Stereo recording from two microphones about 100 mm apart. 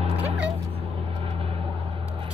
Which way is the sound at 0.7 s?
70° right (ahead or behind).